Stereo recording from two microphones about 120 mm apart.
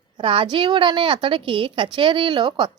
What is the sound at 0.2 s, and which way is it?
A woman's voice, 45° right (ahead or behind).